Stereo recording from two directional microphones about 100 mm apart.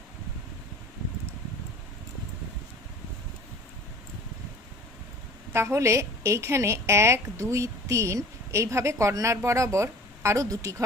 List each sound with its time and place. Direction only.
5.5 s a woman's voice: 25° right (ahead or behind)